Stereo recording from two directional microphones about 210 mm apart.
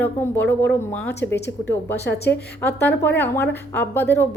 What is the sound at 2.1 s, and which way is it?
Speech, 50° left (ahead or behind).